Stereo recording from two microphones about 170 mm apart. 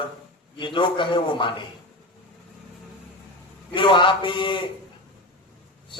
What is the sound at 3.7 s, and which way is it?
Speech, 30° left (ahead or behind).